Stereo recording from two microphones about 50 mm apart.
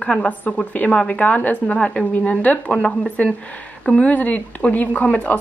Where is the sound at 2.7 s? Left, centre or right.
Centre.